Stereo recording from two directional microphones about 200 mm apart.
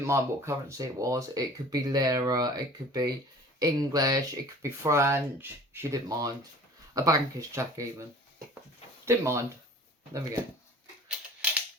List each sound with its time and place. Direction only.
0.0 s speech: 15° right (ahead or behind)
9.0 s speech: 15° right (ahead or behind)